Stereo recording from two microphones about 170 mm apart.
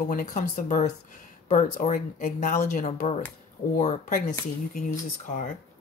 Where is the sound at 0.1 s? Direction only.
45° left (ahead or behind).